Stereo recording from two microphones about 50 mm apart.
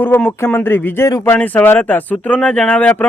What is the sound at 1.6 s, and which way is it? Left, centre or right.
Speech, left.